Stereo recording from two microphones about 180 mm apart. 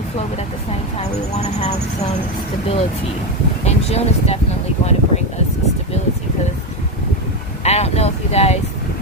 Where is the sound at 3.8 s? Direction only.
35° left (ahead or behind).